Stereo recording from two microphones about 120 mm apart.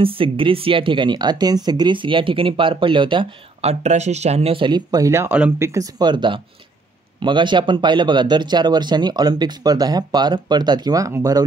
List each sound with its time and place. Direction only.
0.0 s speech: 50° right (ahead or behind)
3.6 s speech: 70° right (ahead or behind); by 11.4 s 30° right (ahead or behind)